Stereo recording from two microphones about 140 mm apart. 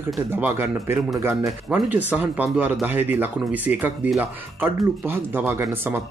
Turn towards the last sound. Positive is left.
turn(degrees=-15)  # may be behind; listen again after turning